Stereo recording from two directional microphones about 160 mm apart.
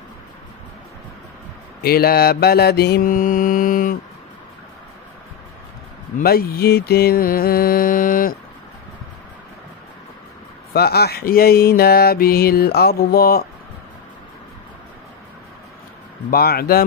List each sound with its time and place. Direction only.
1.8 s mantra: 75° left (ahead or behind)
6.2 s mantra: 70° left (ahead or behind)
10.7 s mantra: 80° left
16.3 s mantra: 70° left (ahead or behind)